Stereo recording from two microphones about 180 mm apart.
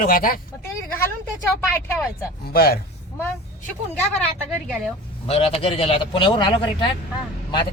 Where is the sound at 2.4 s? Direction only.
60° left (ahead or behind).